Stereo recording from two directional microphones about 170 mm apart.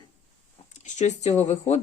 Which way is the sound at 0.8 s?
40° left (ahead or behind).